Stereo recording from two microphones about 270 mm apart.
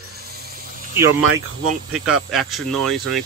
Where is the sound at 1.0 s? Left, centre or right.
Centre.